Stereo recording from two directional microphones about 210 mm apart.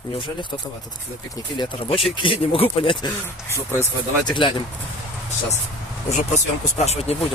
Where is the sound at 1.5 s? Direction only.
20° left (ahead or behind).